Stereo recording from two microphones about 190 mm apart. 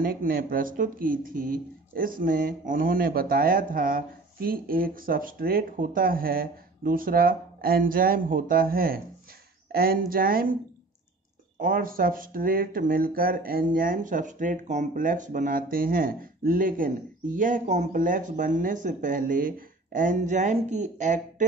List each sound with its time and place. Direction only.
0.0 s speech: 50° right (ahead or behind)
11.6 s speech: 50° right (ahead or behind)